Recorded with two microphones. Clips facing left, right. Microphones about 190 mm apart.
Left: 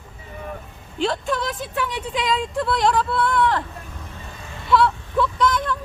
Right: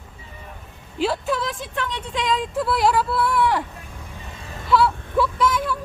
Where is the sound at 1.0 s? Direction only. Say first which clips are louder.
Even; 5° right (ahead or behind).